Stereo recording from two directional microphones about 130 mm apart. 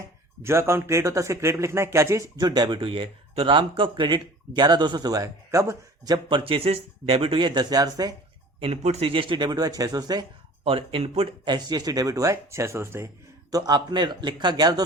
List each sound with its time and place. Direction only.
0.4 s a man's voice: 20° right (ahead or behind)
6.2 s speech: 45° right (ahead or behind); by 8.1 s 30° right (ahead or behind)
8.6 s speech: 55° right (ahead or behind); by 10.2 s 30° right (ahead or behind)
10.6 s speech: 45° right (ahead or behind)
11.4 s a man's voice: 35° right (ahead or behind)
13.5 s speech: 30° right (ahead or behind)